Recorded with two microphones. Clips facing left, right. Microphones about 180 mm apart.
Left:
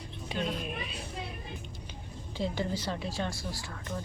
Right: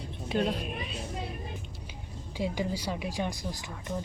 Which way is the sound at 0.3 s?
40° right (ahead or behind).